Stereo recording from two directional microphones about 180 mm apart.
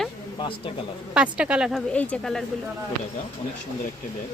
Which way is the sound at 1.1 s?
5° right (ahead or behind).